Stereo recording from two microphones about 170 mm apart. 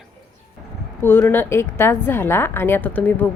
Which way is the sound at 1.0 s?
10° left (ahead or behind).